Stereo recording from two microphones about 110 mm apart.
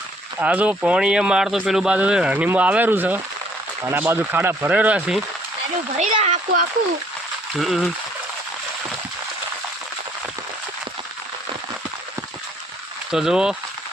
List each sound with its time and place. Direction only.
0.3 s speech: 10° right (ahead or behind)
6.0 s speech: 90° right
7.6 s speech: centre (ahead or behind)
13.1 s speech: 5° right (ahead or behind)